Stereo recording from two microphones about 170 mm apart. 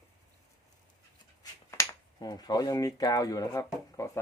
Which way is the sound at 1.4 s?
20° left (ahead or behind).